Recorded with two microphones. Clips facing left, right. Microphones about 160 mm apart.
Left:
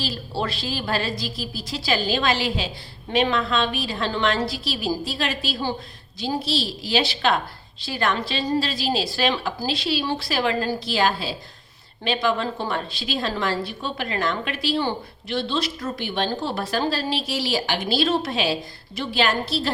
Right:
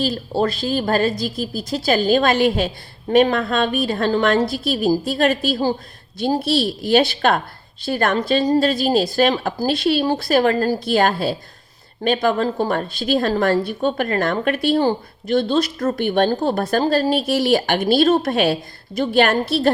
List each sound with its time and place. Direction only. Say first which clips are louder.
0.0 s a woman's voice: right 8 dB; 45° right (ahead or behind)